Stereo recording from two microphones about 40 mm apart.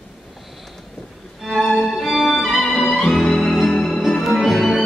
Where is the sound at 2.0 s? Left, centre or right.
Centre.